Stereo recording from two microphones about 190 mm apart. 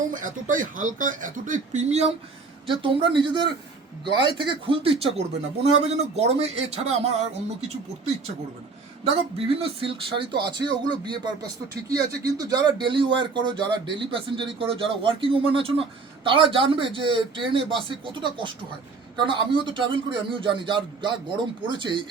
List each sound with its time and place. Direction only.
0.1 s a man's voice: 45° right (ahead or behind)
9.0 s a man's voice: 30° right (ahead or behind)